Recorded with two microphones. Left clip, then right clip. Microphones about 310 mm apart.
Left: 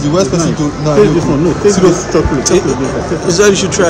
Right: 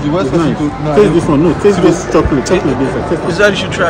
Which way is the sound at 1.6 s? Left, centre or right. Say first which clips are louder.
Even; right.